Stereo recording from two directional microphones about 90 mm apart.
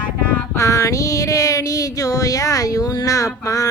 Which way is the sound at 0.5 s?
35° left (ahead or behind).